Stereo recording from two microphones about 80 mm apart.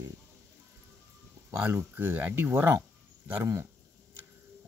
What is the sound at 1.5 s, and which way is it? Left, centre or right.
Speech, right.